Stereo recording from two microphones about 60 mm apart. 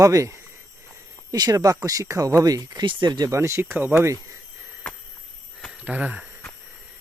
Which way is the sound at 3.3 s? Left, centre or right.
Right.